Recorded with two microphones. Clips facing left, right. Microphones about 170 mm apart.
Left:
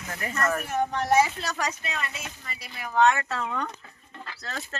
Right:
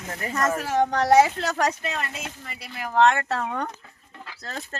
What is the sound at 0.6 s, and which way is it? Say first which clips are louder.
Speech: right 5 dB; 90° right.